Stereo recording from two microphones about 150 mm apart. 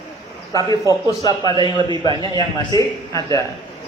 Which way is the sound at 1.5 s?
35° right (ahead or behind).